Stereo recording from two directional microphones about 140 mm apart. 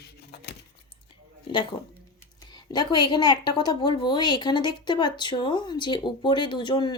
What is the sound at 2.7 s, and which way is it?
A woman's voice, 30° left (ahead or behind).